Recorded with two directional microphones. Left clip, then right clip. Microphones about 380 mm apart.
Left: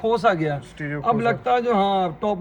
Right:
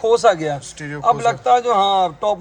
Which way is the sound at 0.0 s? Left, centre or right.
Right.